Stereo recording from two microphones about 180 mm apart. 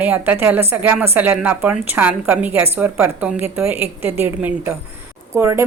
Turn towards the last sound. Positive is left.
turn(degrees=-15)  # may be behind; listen again after turning